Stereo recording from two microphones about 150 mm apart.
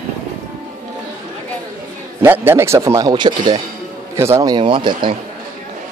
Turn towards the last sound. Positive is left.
turn(degrees=-35)  # may be behind; listen again after turning